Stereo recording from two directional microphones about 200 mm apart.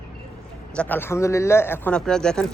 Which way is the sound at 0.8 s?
10° left (ahead or behind).